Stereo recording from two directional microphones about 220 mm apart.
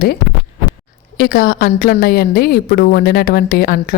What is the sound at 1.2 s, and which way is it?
A woman's voice, 40° left (ahead or behind).